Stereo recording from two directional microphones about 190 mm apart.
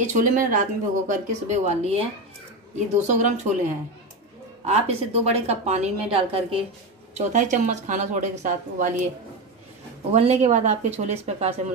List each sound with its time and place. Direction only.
0.0 s a woman's voice: 40° right (ahead or behind)
7.2 s a woman's voice: 40° right (ahead or behind)
10.1 s a woman's voice: 35° right (ahead or behind)